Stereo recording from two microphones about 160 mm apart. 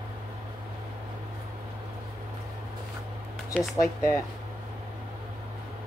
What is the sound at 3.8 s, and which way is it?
Speech, 15° left (ahead or behind).